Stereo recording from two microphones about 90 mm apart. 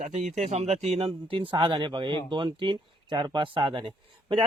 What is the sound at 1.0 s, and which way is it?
A man's voice, 70° right (ahead or behind).